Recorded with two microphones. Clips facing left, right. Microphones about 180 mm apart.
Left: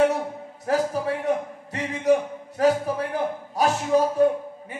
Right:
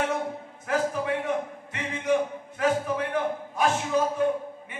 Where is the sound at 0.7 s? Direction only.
35° left (ahead or behind).